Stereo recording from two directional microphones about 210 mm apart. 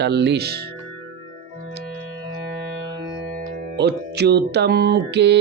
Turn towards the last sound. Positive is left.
turn(degrees=-55)  # may be behind; listen again after turning